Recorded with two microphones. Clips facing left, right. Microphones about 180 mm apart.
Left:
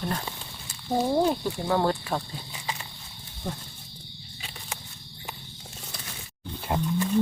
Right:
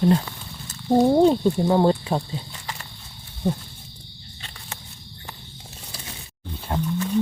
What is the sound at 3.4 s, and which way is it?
Speech, 15° right (ahead or behind).